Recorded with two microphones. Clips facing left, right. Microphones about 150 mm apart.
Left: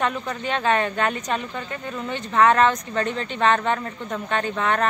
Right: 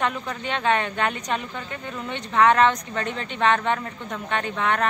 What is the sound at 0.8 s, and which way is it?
Speech, 15° right (ahead or behind).